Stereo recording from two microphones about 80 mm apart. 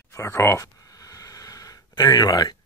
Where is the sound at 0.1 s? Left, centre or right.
Left.